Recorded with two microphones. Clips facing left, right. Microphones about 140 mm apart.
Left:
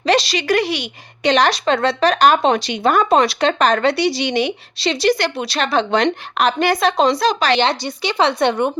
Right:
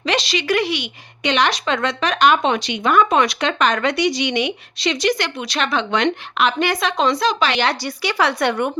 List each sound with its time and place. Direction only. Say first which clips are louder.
0.0 s speech: left 4 dB; 35° left (ahead or behind)
7.6 s speech: left 2 dB; 25° left (ahead or behind)